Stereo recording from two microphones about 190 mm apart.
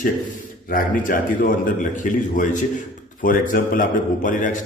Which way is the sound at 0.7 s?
45° left (ahead or behind).